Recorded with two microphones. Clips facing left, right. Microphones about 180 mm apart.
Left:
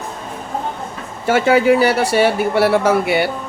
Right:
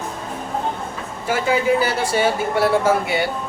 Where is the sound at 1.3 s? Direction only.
75° left (ahead or behind).